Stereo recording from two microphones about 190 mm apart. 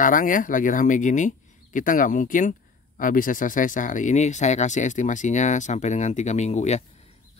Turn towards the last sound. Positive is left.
turn(degrees=35)  # may be behind; listen again after turning